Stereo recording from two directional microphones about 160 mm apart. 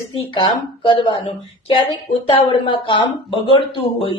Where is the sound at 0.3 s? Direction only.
30° left (ahead or behind).